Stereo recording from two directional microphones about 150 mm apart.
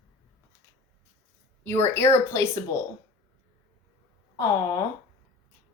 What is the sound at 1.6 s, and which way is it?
Speech, 15° left (ahead or behind).